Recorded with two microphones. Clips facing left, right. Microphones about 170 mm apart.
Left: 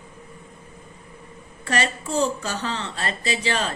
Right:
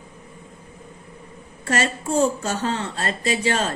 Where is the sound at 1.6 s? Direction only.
45° right (ahead or behind).